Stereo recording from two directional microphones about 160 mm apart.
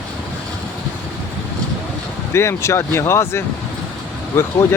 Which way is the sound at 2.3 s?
15° left (ahead or behind).